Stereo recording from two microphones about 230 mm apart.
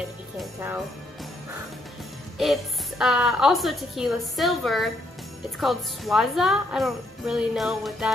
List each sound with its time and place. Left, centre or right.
2.3 s a woman's voice: centre